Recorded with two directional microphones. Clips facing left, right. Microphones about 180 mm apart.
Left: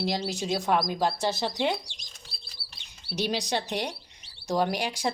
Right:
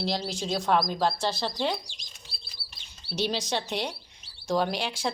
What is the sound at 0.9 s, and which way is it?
Speech, 20° left (ahead or behind).